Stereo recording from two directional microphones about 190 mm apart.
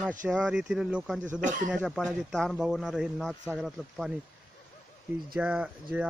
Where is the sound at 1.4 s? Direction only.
40° right (ahead or behind).